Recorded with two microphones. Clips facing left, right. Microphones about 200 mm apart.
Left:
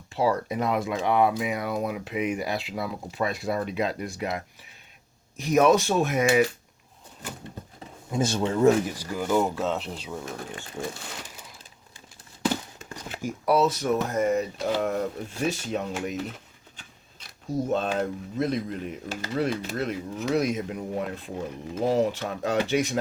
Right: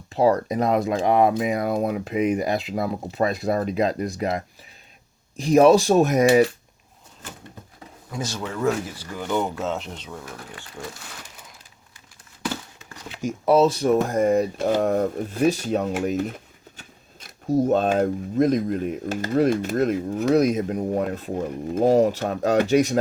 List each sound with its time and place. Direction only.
0.1 s speech: 40° right (ahead or behind)
8.3 s speech: 25° left (ahead or behind); by 10.2 s 10° left (ahead or behind)
10.2 s speech: 25° left (ahead or behind)
13.2 s speech: 25° right (ahead or behind)
14.6 s speech: 45° right (ahead or behind)